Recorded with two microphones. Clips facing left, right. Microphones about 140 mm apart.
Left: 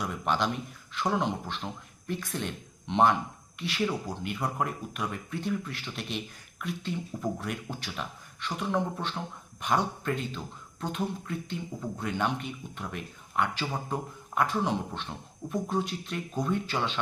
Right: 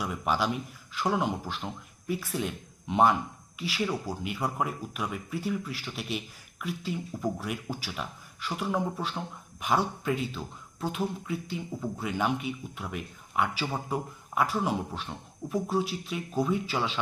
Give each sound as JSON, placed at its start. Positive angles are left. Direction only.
{"t": 0.0, "sound": "speech", "side_deg": -5}